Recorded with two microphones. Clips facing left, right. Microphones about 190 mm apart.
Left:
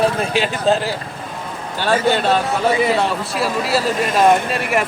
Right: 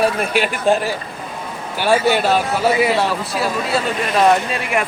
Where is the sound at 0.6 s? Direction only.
15° right (ahead or behind); by 3.8 s centre (ahead or behind).